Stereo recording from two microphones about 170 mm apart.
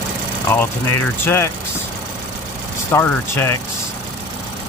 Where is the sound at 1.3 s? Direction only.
15° left (ahead or behind).